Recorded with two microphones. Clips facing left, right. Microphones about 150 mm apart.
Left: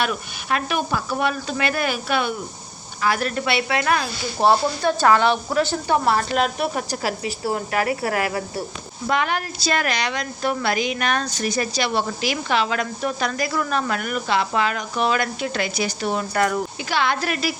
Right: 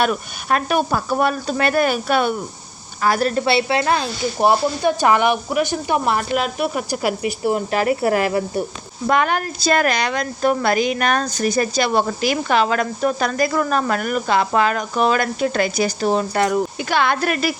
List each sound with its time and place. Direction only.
0.0 s a woman's voice: 45° right (ahead or behind); by 4.1 s 30° right (ahead or behind)
4.4 s speech: 15° right (ahead or behind)
6.3 s speech: 5° right (ahead or behind)
6.9 s speech: 15° right (ahead or behind)
9.0 s speech: 45° right (ahead or behind); by 16.6 s 25° right (ahead or behind)
16.9 s speech: 50° right (ahead or behind)